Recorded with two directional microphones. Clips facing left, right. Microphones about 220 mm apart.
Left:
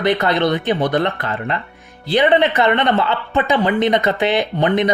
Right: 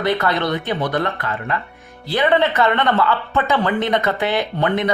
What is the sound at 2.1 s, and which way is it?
Speech, 20° left (ahead or behind).